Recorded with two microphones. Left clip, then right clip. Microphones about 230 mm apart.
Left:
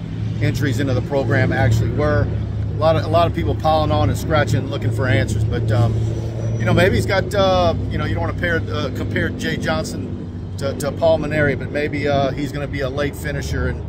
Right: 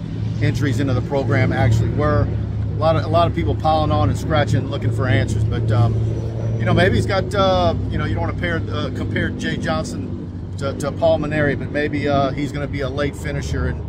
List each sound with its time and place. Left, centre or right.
0.4 s speech: centre